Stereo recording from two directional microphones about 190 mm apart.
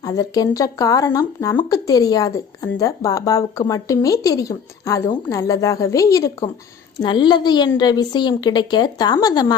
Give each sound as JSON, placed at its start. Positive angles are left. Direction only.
{"t": 0.0, "sound": "a woman's voice", "side_deg": 20}